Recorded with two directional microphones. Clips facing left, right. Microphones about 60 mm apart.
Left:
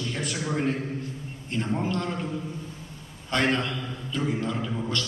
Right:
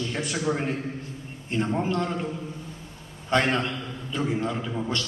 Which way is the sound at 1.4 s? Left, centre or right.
Right.